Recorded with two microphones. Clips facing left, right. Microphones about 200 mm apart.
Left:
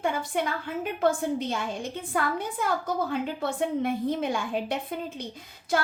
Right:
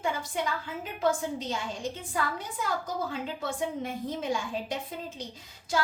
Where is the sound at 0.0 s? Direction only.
60° left (ahead or behind).